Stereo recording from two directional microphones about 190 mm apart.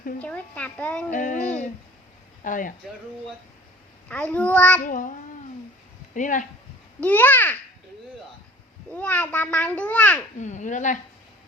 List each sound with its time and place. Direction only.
0.2 s a child's voice: 5° left (ahead or behind)
1.1 s a child's voice: 40° left (ahead or behind)
2.4 s babbling: 45° left (ahead or behind)
4.1 s a child's voice: 5° left (ahead or behind)
4.8 s babbling: 45° left (ahead or behind)
6.1 s babbling: 40° left (ahead or behind)
7.0 s a child's voice: 10° left (ahead or behind)
8.9 s a child's voice: 10° left (ahead or behind)
10.3 s a child's voice: 40° left (ahead or behind)